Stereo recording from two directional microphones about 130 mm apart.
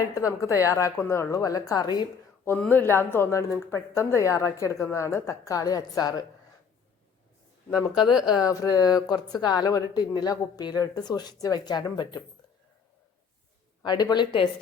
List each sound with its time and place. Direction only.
0.0 s a woman's voice: 25° left (ahead or behind)
2.4 s a woman's voice: 15° left (ahead or behind)
8.4 s speech: 30° left (ahead or behind)
13.8 s speech: 35° left (ahead or behind)